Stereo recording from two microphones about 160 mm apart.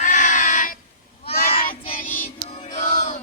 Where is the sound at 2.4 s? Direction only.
40° left (ahead or behind).